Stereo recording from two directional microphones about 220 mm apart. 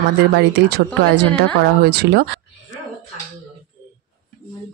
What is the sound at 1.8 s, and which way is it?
Speech, 45° right (ahead or behind).